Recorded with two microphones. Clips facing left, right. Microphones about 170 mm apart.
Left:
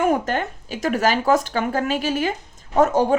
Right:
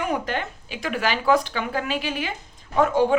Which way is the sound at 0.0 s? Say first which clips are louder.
Left 6 dB; 45° left (ahead or behind).